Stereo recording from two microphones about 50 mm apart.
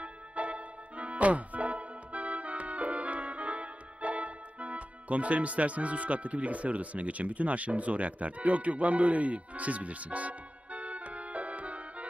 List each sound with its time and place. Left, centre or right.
0.0 s music: right